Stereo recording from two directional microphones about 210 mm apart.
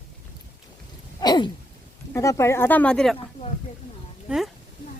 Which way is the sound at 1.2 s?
20° left (ahead or behind).